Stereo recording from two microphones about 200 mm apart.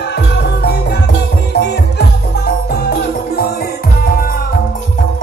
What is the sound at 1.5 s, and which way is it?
Music, 55° left (ahead or behind).